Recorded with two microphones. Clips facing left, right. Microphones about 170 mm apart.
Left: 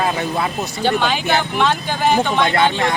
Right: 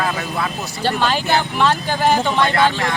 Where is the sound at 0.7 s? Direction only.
Centre (ahead or behind).